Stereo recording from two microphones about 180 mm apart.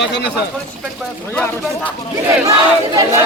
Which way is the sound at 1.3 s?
5° left (ahead or behind).